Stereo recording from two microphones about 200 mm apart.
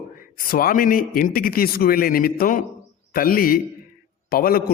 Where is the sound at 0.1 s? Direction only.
45° left (ahead or behind).